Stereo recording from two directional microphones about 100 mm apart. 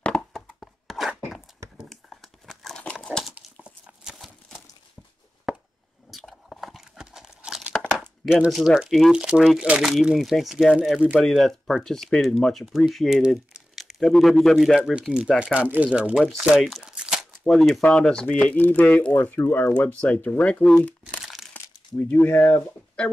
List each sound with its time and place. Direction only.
0.0 s a sound: 5° left (ahead or behind)
2.8 s crumpling: 10° left (ahead or behind)
3.6 s a sound: 5° right (ahead or behind)
6.1 s crunch: centre (ahead or behind)
7.8 s crumpling: 5° left (ahead or behind)
8.5 s speech: 5° right (ahead or behind)
14.8 s speech: 10° right (ahead or behind)
16.3 s speech: centre (ahead or behind)
16.8 s tearing: 10° right (ahead or behind)
17.3 s speech: 5° left (ahead or behind)
20.7 s crumpling: 15° left (ahead or behind)
21.5 s a sound: 20° left (ahead or behind)